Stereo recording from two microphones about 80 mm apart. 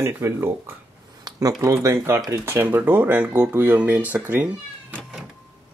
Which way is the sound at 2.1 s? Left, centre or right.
Right.